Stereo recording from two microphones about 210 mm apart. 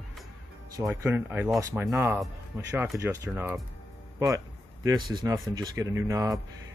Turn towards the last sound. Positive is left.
turn(degrees=-15)  # may be behind; listen again after turning